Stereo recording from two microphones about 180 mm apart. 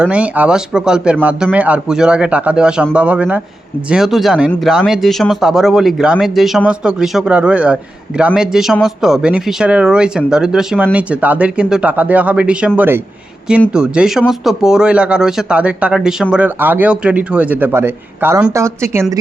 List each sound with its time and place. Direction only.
0.0 s a man's voice: 5° right (ahead or behind)